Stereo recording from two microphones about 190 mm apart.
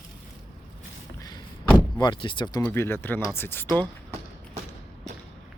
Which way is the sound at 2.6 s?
10° left (ahead or behind).